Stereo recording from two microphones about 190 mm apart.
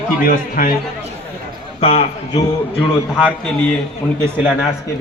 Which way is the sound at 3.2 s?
5° left (ahead or behind).